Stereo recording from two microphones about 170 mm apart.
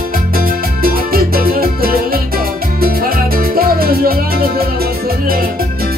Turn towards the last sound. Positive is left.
turn(degrees=-60)  # may be behind; listen again after turning